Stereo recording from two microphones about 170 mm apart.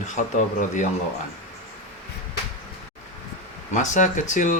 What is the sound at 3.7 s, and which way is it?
Speech, 45° left (ahead or behind).